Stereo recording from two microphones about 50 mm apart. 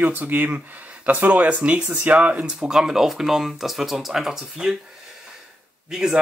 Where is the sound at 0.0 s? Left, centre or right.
Right.